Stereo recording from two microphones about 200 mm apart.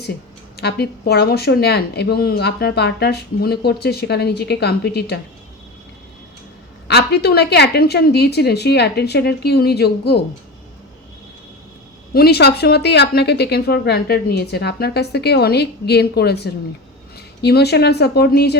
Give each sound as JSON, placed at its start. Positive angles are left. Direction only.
{"t": 0.5, "sound": "speech", "side_deg": 55}
{"t": 6.8, "sound": "a woman's voice", "side_deg": 55}
{"t": 12.1, "sound": "a woman's voice", "side_deg": 55}